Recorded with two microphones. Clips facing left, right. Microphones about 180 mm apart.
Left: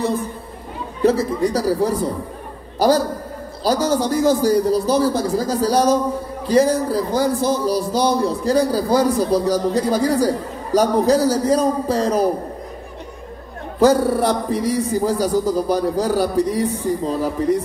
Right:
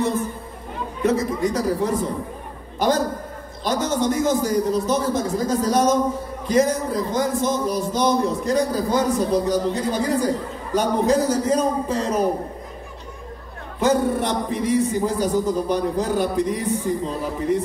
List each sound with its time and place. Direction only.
1.0 s a man's voice: 30° left (ahead or behind)
13.7 s a man's voice: 35° left (ahead or behind)